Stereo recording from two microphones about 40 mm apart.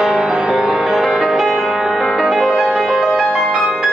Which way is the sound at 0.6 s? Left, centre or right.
Centre.